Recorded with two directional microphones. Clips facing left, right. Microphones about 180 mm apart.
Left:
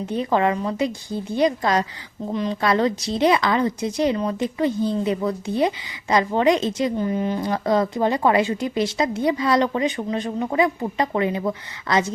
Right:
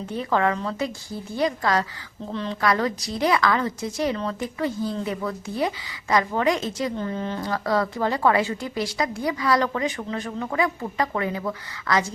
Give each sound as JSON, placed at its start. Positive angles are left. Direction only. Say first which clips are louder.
{"t": 0.0, "sound": "a woman's voice", "louder": "left 3 dB", "side_deg": 20}